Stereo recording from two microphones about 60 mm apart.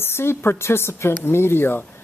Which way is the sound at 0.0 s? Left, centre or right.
Left.